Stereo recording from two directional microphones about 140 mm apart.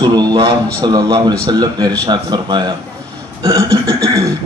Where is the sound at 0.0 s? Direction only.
30° right (ahead or behind).